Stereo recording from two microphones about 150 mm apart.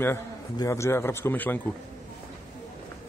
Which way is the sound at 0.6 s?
20° left (ahead or behind).